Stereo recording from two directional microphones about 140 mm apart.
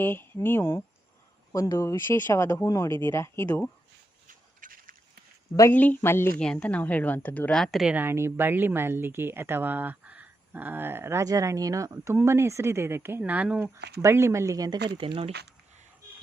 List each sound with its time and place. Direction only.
0.0 s a woman's voice: 15° left (ahead or behind)
4.3 s a sound: 75° right (ahead or behind)
5.7 s a woman's voice: 10° left (ahead or behind); by 8.0 s 5° right (ahead or behind)
8.0 s speech: 15° right (ahead or behind); by 15.3 s 40° right (ahead or behind)